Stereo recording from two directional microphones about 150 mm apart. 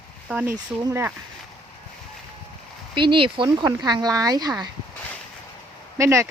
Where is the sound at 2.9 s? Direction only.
35° right (ahead or behind).